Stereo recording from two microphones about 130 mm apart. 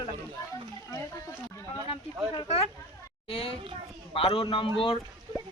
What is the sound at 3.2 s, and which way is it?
A man's voice, 45° left (ahead or behind).